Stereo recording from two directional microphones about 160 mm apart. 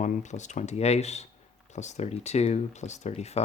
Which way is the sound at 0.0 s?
50° left (ahead or behind).